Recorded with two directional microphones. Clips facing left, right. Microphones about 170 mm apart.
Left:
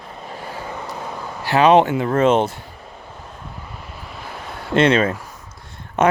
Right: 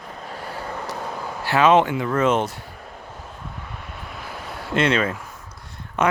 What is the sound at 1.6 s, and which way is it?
Speech, 35° left (ahead or behind).